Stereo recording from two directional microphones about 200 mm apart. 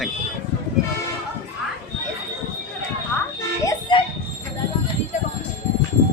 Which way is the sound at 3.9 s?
25° left (ahead or behind).